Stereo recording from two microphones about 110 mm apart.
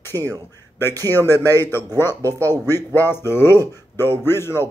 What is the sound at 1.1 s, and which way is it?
Speech, 20° left (ahead or behind).